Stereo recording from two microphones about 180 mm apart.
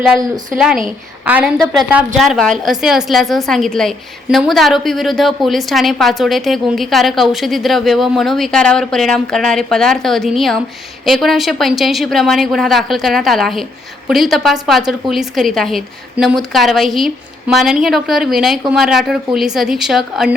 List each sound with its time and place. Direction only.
0.5 s a woman's voice: 5° right (ahead or behind)